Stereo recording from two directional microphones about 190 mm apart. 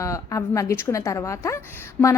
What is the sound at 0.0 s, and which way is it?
A woman's voice, 15° left (ahead or behind).